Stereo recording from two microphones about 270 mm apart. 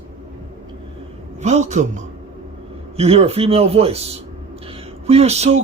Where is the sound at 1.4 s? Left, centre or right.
Right.